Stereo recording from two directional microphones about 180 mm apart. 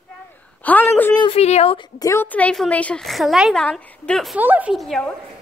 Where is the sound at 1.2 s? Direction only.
35° left (ahead or behind).